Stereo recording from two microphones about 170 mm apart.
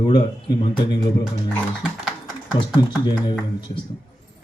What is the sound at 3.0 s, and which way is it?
Speech, 25° left (ahead or behind).